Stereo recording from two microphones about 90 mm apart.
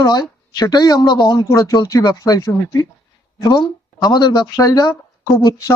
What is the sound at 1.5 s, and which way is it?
Speech, 35° left (ahead or behind).